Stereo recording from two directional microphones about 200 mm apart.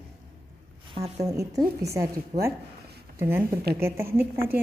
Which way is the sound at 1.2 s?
15° right (ahead or behind).